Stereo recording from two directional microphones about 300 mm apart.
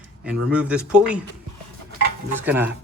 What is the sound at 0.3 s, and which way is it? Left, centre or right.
Speech, centre.